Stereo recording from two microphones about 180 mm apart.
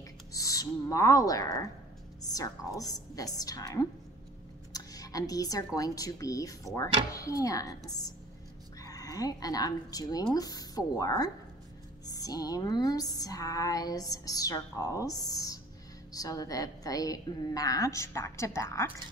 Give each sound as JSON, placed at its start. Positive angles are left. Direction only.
{"t": 0.3, "sound": "speech", "side_deg": 20}
{"t": 2.2, "sound": "music", "side_deg": 20}
{"t": 4.7, "sound": "a sound", "side_deg": 20}
{"t": 5.8, "sound": "music", "side_deg": 20}
{"t": 8.8, "sound": "music", "side_deg": 20}